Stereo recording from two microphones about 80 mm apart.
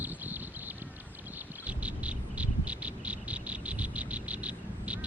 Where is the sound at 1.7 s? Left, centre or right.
Centre.